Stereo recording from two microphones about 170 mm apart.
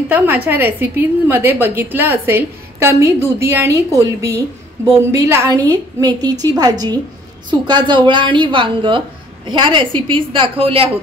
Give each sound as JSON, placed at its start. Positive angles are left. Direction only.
{"t": 0.1, "sound": "a woman's voice", "side_deg": -10}